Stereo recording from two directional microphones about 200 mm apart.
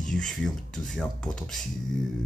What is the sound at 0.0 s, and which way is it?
Speech, 5° left (ahead or behind).